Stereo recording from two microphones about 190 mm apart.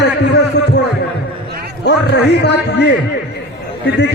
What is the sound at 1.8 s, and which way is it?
A man's voice, 65° left (ahead or behind).